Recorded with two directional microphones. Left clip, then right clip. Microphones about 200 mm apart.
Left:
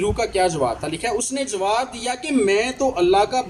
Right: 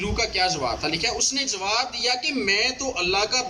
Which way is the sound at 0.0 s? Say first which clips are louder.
Left 4 dB; 35° left (ahead or behind).